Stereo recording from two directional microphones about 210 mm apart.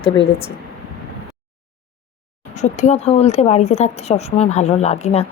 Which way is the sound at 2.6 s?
35° left (ahead or behind).